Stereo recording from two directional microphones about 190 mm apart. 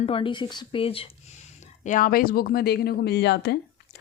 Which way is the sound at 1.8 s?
45° left (ahead or behind).